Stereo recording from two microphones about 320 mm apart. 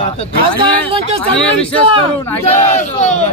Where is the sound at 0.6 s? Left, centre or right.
Centre.